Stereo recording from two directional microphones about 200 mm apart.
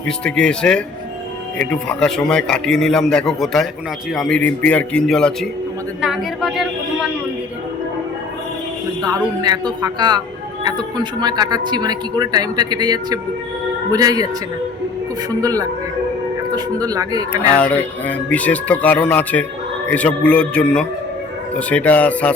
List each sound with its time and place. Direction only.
0.3 s a man's voice: 5° left (ahead or behind)
9.0 s speech: 20° right (ahead or behind)
15.4 s speech: 15° right (ahead or behind)
17.6 s a man's voice: 10° left (ahead or behind)